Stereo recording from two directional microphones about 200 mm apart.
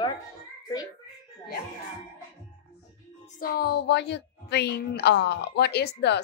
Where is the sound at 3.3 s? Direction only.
50° left (ahead or behind).